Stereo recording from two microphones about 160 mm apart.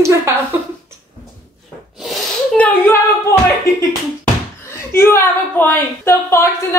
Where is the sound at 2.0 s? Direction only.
5° left (ahead or behind).